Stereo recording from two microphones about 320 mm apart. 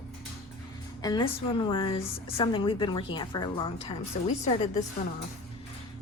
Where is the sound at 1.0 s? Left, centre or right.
Centre.